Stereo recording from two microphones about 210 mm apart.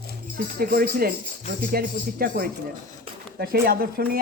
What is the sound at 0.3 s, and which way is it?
Speech, 45° right (ahead or behind).